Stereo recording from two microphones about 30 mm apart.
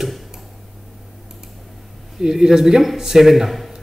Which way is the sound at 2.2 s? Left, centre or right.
Right.